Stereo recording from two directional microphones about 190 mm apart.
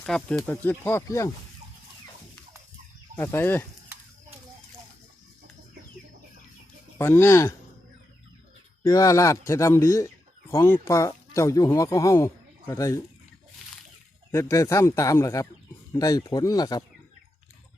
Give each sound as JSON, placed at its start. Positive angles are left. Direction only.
{"t": 0.0, "sound": "speech", "side_deg": 5}
{"t": 3.2, "sound": "speech", "side_deg": 10}
{"t": 7.0, "sound": "speech", "side_deg": 15}
{"t": 8.8, "sound": "speech", "side_deg": 20}
{"t": 14.3, "sound": "speech", "side_deg": 15}